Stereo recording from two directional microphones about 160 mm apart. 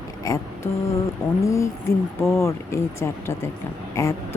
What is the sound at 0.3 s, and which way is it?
Speech, 15° left (ahead or behind).